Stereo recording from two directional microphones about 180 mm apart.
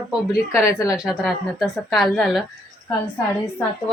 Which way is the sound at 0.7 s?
20° left (ahead or behind).